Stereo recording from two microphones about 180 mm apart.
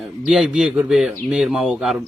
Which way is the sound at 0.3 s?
5° right (ahead or behind).